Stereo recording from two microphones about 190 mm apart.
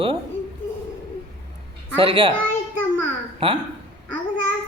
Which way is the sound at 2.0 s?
30° right (ahead or behind).